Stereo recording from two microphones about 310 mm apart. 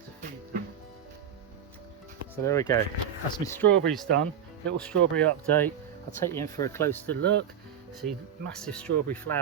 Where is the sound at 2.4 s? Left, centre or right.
Centre.